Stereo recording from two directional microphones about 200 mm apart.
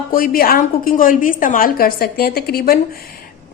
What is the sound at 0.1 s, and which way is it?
A woman's voice, 45° left (ahead or behind).